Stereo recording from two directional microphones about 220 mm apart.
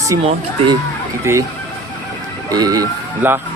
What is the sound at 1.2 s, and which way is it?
Speech, 10° right (ahead or behind).